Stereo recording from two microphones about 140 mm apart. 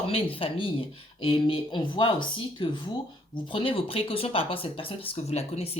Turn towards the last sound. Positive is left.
turn(degrees=50)  # may be behind; listen again after turning